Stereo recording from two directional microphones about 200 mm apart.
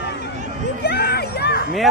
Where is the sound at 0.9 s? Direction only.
50° left (ahead or behind).